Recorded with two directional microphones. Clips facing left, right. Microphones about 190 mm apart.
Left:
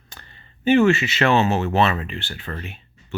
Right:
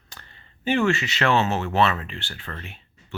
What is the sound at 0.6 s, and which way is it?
Speech, 20° left (ahead or behind).